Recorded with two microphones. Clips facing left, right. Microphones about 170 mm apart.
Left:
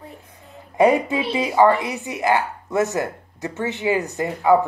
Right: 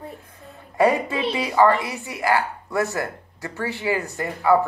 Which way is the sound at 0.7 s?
15° left (ahead or behind).